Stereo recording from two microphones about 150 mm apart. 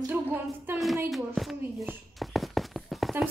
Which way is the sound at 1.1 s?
Centre (ahead or behind).